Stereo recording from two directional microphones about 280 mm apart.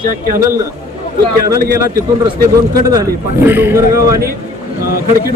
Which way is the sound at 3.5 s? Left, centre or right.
Centre.